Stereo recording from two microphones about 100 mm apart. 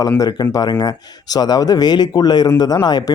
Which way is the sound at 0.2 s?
40° left (ahead or behind).